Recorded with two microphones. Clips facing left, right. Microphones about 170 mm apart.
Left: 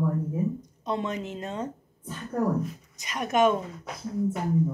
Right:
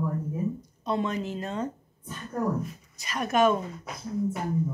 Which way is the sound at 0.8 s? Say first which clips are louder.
Right 2 dB; 20° left (ahead or behind).